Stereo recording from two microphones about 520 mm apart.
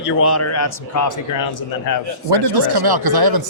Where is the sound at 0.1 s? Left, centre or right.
Left.